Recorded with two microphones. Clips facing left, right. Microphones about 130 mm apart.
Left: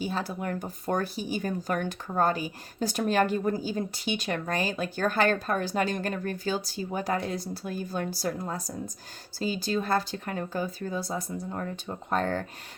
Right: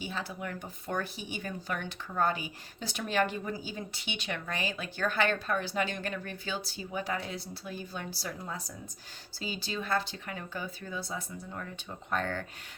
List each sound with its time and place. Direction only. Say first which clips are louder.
0.0 s speech: left 6 dB; 40° left (ahead or behind)